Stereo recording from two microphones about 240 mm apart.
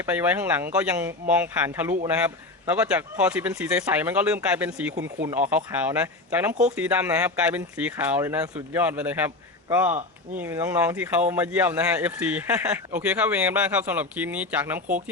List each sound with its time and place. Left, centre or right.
0.0 s speech: centre
14.8 s speech: right